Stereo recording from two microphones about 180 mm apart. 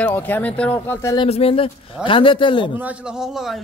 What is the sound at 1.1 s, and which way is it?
A man's voice, 30° left (ahead or behind).